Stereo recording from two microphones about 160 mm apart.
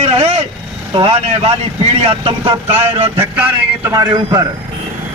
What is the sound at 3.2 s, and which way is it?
A man's voice, 10° right (ahead or behind).